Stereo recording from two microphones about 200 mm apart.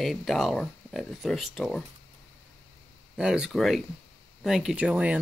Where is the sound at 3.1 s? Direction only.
5° right (ahead or behind).